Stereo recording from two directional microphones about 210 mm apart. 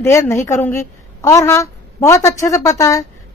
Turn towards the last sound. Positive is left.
turn(degrees=15)  # may be behind; listen again after turning